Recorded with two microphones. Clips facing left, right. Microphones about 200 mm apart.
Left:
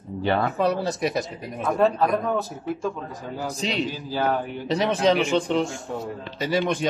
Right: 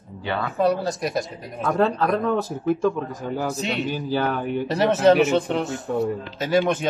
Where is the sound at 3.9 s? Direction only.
65° right (ahead or behind).